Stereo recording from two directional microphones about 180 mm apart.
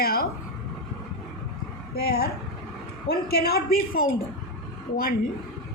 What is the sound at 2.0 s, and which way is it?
A woman's voice, 60° left (ahead or behind).